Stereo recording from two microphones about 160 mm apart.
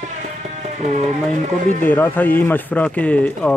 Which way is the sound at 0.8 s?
45° right (ahead or behind).